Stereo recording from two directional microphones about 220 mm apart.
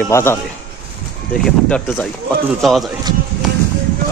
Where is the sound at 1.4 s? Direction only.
5° left (ahead or behind).